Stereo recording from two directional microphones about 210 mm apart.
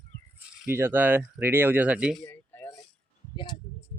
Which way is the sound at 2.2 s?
10° left (ahead or behind).